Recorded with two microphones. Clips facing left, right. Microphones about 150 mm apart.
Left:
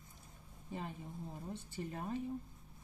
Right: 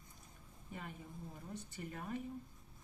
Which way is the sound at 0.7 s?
25° left (ahead or behind).